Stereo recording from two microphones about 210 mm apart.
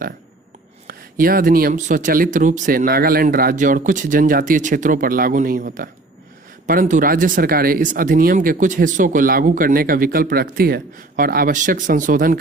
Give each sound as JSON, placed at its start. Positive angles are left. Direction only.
{"t": 0.9, "sound": "speech", "side_deg": -45}